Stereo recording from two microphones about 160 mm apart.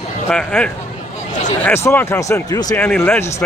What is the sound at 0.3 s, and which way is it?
Speech, 5° left (ahead or behind).